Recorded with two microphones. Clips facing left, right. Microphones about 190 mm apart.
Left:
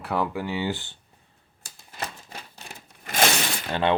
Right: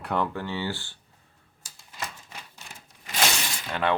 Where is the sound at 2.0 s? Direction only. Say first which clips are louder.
Left 3 dB; 35° left (ahead or behind).